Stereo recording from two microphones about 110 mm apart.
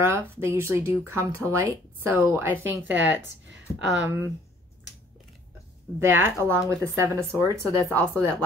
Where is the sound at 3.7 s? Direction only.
30° left (ahead or behind).